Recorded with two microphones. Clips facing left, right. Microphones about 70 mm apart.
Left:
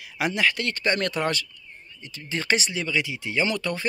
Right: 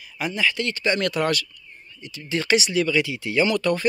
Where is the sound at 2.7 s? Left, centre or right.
Left.